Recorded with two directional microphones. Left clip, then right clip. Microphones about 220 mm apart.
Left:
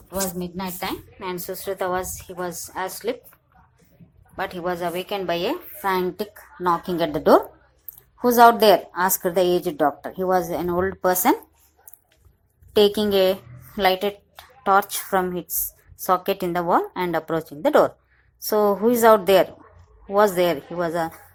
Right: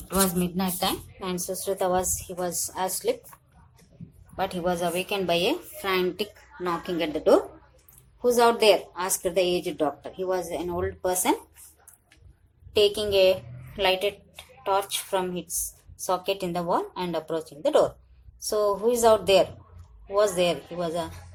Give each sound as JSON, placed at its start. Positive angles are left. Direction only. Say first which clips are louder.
{"t": 0.1, "sound": "a woman's voice", "louder": "right 2 dB", "side_deg": 10}
{"t": 4.4, "sound": "a woman's voice", "louder": "left 1 dB", "side_deg": 5}
{"t": 6.1, "sound": "a woman's voice", "louder": "left 2 dB", "side_deg": 15}
{"t": 12.7, "sound": "a woman's voice", "louder": "left 4 dB", "side_deg": 25}